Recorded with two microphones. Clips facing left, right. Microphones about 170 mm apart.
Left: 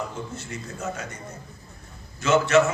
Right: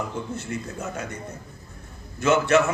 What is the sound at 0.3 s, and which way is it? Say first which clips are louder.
Speech: right 4 dB; 55° right (ahead or behind).